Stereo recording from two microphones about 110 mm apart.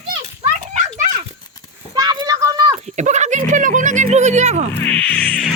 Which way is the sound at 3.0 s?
90° right.